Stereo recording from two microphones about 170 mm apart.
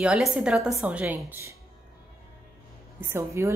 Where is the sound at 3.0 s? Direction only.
15° right (ahead or behind).